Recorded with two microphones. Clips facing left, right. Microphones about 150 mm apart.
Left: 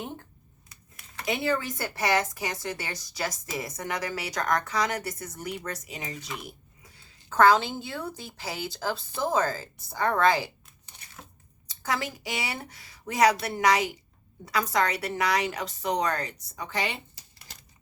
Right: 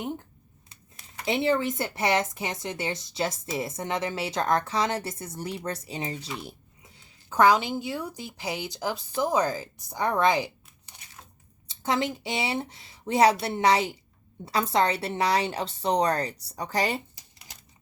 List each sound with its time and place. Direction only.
0.7 s speech: 30° right (ahead or behind)
11.7 s a woman's voice: 25° right (ahead or behind); by 17.0 s 40° right (ahead or behind)